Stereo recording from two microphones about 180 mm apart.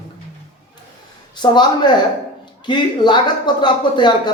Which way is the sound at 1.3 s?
25° left (ahead or behind).